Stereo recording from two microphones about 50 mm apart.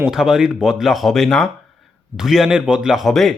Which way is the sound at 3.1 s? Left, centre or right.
Centre.